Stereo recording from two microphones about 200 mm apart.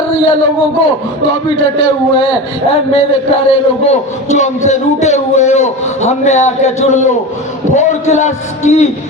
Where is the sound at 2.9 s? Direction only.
30° left (ahead or behind).